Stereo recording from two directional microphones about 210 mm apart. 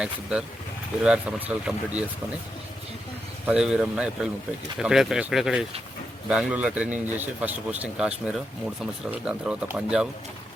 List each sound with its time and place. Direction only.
0.0 s speech: 5° right (ahead or behind)
3.4 s speech: 5° right (ahead or behind)